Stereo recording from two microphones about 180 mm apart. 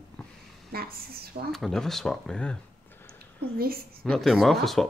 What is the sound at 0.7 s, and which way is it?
Speech, 60° right (ahead or behind).